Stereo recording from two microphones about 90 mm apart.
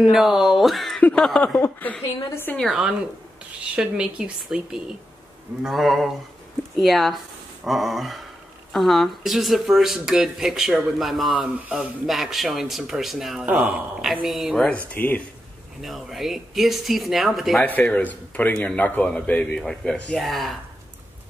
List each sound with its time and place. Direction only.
0.1 s a man's voice: 5° right (ahead or behind)
1.6 s a woman's voice: 20° left (ahead or behind)
2.5 s speech: centre (ahead or behind)
11.3 s speech: 15° right (ahead or behind)
12.1 s speech: centre (ahead or behind)
15.0 s a woman's voice: 20° left (ahead or behind)
15.8 s speech: centre (ahead or behind)
17.6 s a man's voice: 20° left (ahead or behind); by 20.5 s centre (ahead or behind)